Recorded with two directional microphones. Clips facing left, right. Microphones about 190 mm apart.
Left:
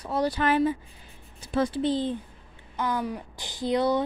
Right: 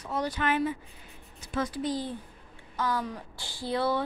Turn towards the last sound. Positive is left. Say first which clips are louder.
# left 4 dB
turn(degrees=20)  # may be behind; listen again after turning